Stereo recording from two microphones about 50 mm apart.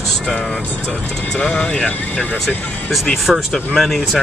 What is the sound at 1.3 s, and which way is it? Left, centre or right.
Speech, left.